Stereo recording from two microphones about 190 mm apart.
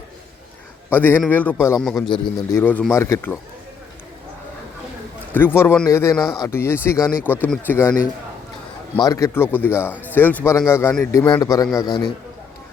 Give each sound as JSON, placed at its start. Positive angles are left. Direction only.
{"t": 0.9, "sound": "speech", "side_deg": 10}
{"t": 2.0, "sound": "a man's voice", "side_deg": 20}
{"t": 2.6, "sound": "speech", "side_deg": 10}
{"t": 5.3, "sound": "speech", "side_deg": 10}
{"t": 6.9, "sound": "speech", "side_deg": -5}
{"t": 7.4, "sound": "speech", "side_deg": 10}
{"t": 9.0, "sound": "a man's voice", "side_deg": 15}